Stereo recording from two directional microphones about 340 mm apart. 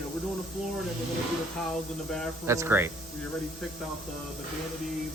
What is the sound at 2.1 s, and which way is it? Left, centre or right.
Speech, centre.